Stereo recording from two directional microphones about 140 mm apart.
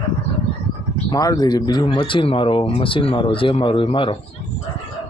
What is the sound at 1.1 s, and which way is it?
Speech, 30° left (ahead or behind).